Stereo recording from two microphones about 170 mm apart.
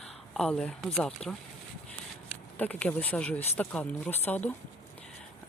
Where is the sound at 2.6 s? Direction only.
10° left (ahead or behind).